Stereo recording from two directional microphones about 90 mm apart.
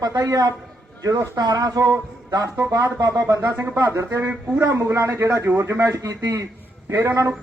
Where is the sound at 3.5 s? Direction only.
25° right (ahead or behind).